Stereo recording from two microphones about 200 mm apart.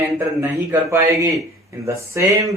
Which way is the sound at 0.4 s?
10° right (ahead or behind).